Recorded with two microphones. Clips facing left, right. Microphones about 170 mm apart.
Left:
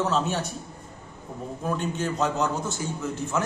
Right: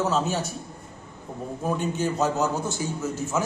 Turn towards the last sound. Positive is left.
turn(degrees=-5)  # may be behind; listen again after turning